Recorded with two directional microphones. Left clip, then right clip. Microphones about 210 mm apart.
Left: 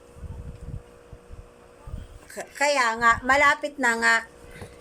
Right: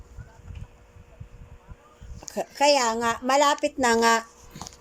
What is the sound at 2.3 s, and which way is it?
A woman's voice, 20° right (ahead or behind).